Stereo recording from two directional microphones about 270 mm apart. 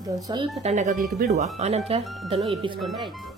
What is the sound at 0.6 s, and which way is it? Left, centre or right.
Speech, right.